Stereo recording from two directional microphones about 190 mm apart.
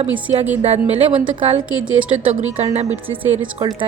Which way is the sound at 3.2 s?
20° right (ahead or behind).